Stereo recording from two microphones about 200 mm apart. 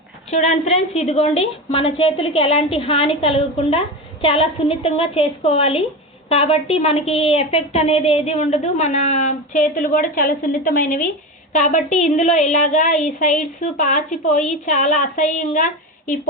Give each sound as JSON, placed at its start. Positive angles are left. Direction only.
{"t": 0.3, "sound": "a woman's voice", "side_deg": 35}